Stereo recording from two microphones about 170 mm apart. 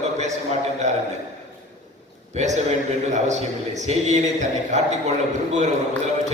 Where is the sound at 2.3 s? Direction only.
40° right (ahead or behind).